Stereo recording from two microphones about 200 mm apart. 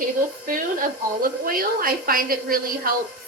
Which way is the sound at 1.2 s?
45° right (ahead or behind).